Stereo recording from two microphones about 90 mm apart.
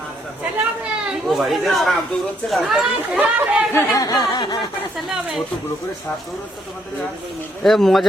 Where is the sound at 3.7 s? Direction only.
40° left (ahead or behind); by 4.6 s 55° left (ahead or behind).